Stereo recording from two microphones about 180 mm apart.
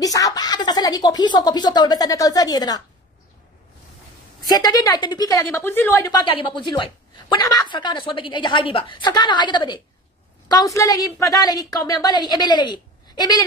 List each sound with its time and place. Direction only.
0.0 s speech: 20° left (ahead or behind)
4.5 s a woman's voice: 20° left (ahead or behind)
5.5 s speech: 10° left (ahead or behind)
6.2 s a woman's voice: 30° left (ahead or behind)